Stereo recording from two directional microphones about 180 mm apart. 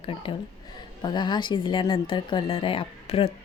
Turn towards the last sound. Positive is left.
turn(degrees=30)  # may be behind; listen again after turning